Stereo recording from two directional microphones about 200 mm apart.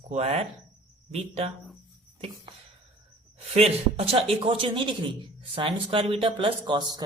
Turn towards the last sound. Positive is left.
turn(degrees=-20)  # may be behind; listen again after turning